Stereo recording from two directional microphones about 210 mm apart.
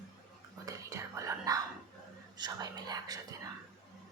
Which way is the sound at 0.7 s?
15° right (ahead or behind).